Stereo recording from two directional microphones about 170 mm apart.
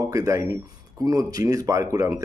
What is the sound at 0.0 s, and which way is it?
Speech, 20° right (ahead or behind).